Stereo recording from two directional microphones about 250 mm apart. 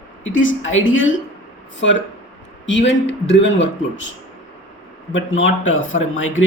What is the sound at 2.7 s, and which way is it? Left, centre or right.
A man's voice, left.